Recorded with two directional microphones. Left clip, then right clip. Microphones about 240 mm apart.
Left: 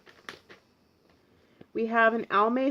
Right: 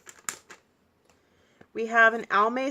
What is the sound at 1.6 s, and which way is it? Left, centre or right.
Speech, centre.